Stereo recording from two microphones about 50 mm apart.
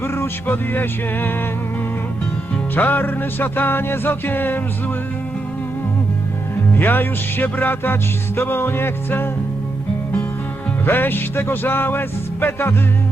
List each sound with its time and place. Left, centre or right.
0.0 s music: left
2.7 s music: left
6.7 s music: left
10.8 s music: left